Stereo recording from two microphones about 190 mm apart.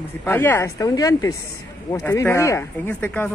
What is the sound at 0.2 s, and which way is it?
Speech, 10° left (ahead or behind).